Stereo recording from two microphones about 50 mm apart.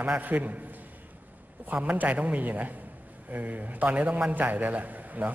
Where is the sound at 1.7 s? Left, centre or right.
Right.